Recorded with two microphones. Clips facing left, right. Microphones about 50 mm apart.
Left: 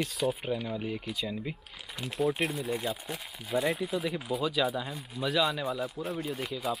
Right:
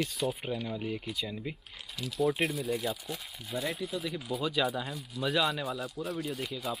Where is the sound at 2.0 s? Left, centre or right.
Left.